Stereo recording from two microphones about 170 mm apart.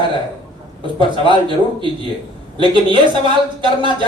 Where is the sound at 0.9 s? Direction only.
30° right (ahead or behind).